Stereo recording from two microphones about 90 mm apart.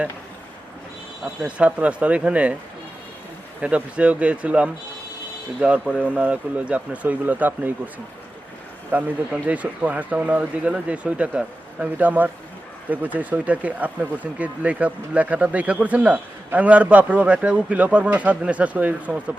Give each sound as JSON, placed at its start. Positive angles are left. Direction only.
{"t": 1.2, "sound": "speech", "side_deg": -15}
{"t": 3.6, "sound": "speech", "side_deg": -15}
{"t": 8.9, "sound": "speech", "side_deg": -20}